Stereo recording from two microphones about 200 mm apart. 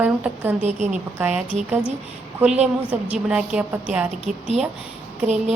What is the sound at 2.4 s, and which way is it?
Speech, 5° right (ahead or behind).